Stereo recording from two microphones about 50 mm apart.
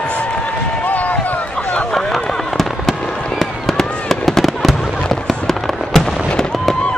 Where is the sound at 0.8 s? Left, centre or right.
Left.